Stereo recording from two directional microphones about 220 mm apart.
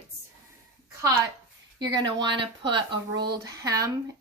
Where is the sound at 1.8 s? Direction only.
20° right (ahead or behind).